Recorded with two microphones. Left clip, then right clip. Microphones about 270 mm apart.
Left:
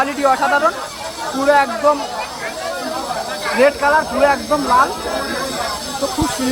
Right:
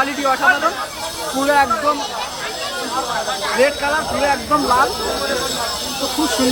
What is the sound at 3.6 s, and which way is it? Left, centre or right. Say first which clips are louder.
Speech: left 5 dB; centre.